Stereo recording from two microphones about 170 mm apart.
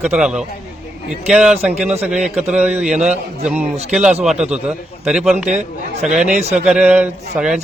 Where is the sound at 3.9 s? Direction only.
Centre (ahead or behind).